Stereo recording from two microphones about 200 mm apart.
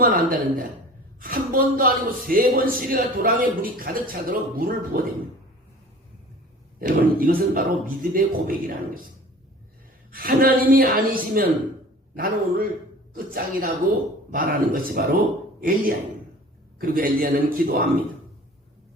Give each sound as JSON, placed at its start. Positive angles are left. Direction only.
{"t": 0.0, "sound": "speech", "side_deg": -45}
{"t": 6.7, "sound": "speech", "side_deg": -45}
{"t": 10.1, "sound": "speech", "side_deg": -45}
{"t": 16.7, "sound": "speech", "side_deg": -45}